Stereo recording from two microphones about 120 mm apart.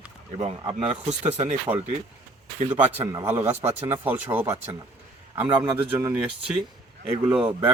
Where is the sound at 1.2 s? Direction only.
70° right (ahead or behind).